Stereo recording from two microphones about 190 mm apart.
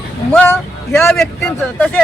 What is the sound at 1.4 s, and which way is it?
Speech, 15° left (ahead or behind).